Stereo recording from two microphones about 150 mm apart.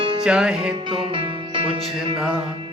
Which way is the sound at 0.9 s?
35° right (ahead or behind).